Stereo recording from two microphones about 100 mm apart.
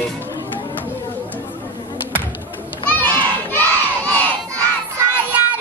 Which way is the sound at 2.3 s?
20° left (ahead or behind).